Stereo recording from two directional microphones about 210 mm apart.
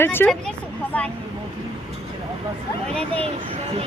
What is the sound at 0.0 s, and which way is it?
Speech, 10° left (ahead or behind).